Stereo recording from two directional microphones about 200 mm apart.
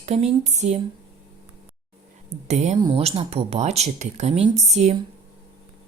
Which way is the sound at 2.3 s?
35° right (ahead or behind).